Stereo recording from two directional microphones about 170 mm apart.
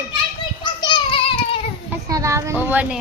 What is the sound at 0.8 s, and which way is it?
Child singing, 30° left (ahead or behind).